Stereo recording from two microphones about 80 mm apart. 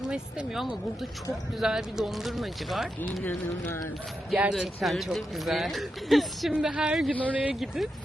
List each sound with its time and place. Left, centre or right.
0.1 s speech: centre
4.4 s speech: centre
6.5 s speech: centre
7.1 s a man's voice: centre